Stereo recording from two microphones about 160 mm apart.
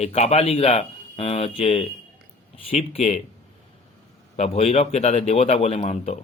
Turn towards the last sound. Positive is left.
turn(degrees=40)  # may be behind; listen again after turning